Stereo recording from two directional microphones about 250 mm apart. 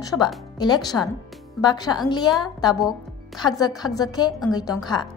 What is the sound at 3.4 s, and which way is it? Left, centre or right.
A woman's voice, centre.